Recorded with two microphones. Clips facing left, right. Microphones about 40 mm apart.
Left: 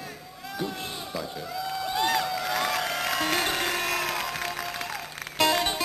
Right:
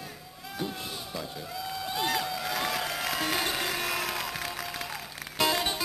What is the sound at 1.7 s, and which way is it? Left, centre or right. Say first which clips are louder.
Music: left 4 dB; centre.